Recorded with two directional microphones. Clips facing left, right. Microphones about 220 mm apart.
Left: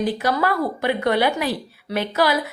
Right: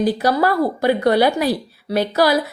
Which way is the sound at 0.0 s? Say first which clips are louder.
Right 4 dB; 35° right (ahead or behind).